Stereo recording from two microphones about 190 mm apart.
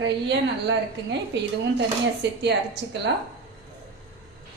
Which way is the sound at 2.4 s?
65° right (ahead or behind).